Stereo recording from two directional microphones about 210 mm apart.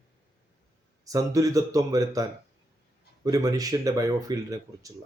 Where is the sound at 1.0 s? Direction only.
15° right (ahead or behind).